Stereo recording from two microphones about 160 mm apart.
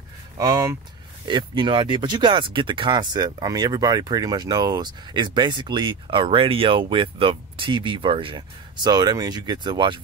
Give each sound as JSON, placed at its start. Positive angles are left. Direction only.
{"t": 0.4, "sound": "speech", "side_deg": -20}